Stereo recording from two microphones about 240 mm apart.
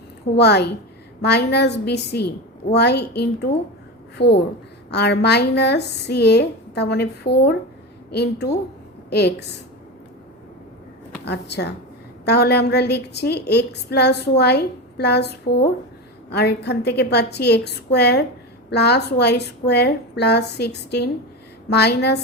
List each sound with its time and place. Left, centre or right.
0.3 s a woman's voice: left
4.9 s a woman's voice: left
11.3 s a woman's voice: left